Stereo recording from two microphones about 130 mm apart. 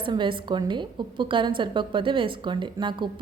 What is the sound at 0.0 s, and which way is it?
A woman's voice, 40° right (ahead or behind).